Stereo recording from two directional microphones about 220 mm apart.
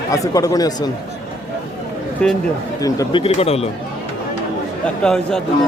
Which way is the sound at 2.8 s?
15° left (ahead or behind).